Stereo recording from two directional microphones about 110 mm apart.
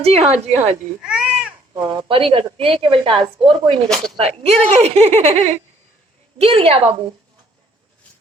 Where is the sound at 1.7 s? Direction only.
40° right (ahead or behind).